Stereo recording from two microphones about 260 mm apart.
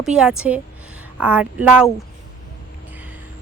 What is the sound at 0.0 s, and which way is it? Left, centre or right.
Speech, centre.